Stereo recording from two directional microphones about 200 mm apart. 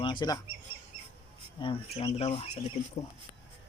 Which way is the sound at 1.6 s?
25° left (ahead or behind).